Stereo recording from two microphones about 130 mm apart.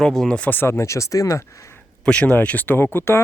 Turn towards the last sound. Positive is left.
turn(degrees=20)  # may be behind; listen again after turning